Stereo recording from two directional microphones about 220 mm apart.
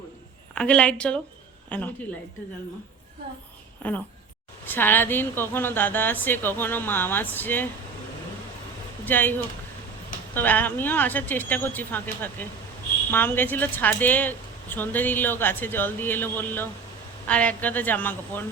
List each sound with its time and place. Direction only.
0.5 s a woman's voice: 5° left (ahead or behind)
3.8 s a woman's voice: 5° left (ahead or behind)
9.0 s a woman's voice: 10° left (ahead or behind)
10.3 s a woman's voice: 10° left (ahead or behind)